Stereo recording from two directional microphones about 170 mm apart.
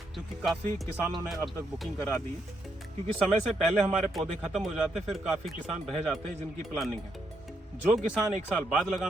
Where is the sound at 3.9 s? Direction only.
Centre (ahead or behind).